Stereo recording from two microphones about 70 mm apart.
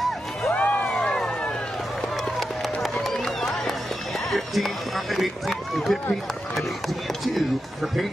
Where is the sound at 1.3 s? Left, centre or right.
Centre.